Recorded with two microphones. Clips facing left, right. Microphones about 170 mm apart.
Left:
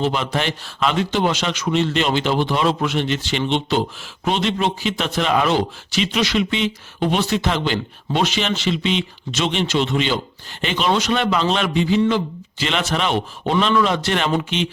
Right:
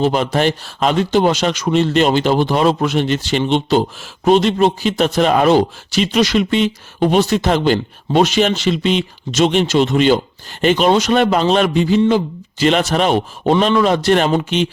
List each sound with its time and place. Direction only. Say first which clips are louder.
0.0 s speech: right 6 dB; 40° right (ahead or behind)